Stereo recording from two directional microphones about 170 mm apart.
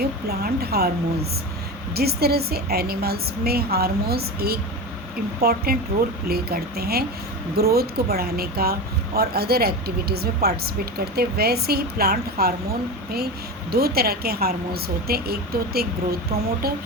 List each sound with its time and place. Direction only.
0.0 s a woman's voice: 65° right (ahead or behind)